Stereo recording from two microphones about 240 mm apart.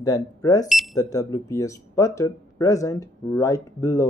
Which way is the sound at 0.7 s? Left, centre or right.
Centre.